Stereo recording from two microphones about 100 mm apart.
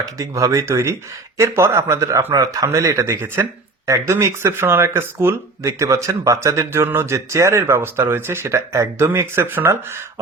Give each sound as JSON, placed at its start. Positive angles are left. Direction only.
{"t": 0.0, "sound": "speech", "side_deg": -30}